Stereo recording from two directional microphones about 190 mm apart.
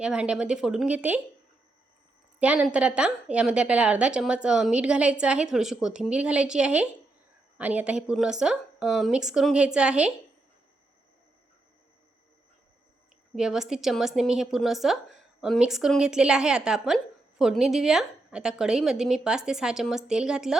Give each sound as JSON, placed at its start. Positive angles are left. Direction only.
{"t": 0.0, "sound": "a woman's voice", "side_deg": -5}
{"t": 2.4, "sound": "a woman's voice", "side_deg": -5}
{"t": 13.3, "sound": "a woman's voice", "side_deg": -5}